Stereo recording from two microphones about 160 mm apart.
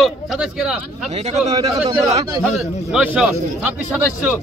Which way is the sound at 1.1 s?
40° right (ahead or behind).